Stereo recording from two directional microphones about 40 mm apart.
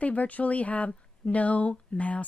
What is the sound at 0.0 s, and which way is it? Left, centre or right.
Speech, left.